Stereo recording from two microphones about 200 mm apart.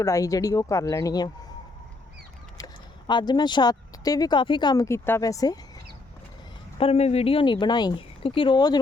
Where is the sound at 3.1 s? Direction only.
20° left (ahead or behind).